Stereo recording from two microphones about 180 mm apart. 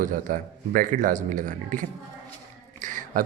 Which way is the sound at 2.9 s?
45° right (ahead or behind).